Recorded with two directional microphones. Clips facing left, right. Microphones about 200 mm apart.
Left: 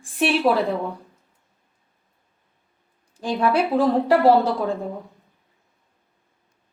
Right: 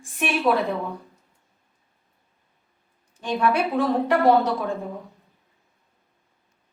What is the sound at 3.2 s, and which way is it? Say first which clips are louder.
A woman's voice: left 2 dB; 35° left (ahead or behind).